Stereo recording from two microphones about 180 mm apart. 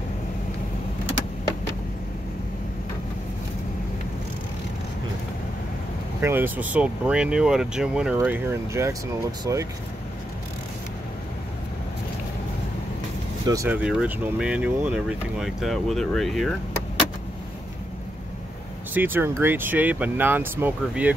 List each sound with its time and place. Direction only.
6.2 s speech: 10° right (ahead or behind)
13.5 s speech: 15° right (ahead or behind)
18.9 s speech: 10° right (ahead or behind)